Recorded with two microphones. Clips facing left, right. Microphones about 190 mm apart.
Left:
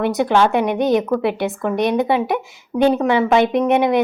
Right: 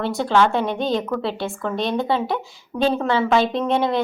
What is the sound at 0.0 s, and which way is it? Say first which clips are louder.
A woman's voice: left 3 dB; 20° left (ahead or behind).